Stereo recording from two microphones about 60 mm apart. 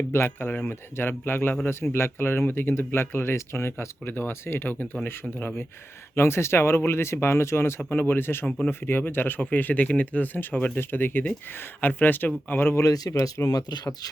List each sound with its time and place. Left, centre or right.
0.1 s speech: left
6.1 s speech: left
7.8 s speech: left
8.4 s speech: centre
8.9 s speech: left
12.9 s speech: left